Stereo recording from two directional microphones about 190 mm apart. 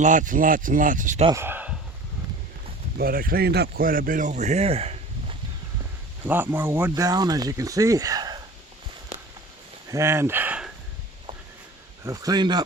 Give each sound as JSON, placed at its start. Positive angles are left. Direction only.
{"t": 0.0, "sound": "speech", "side_deg": -45}
{"t": 1.4, "sound": "a sound", "side_deg": -10}
{"t": 3.0, "sound": "a man's voice", "side_deg": -50}
{"t": 6.2, "sound": "speech", "side_deg": -10}
{"t": 9.9, "sound": "speech", "side_deg": -15}
{"t": 12.0, "sound": "a man's voice", "side_deg": -15}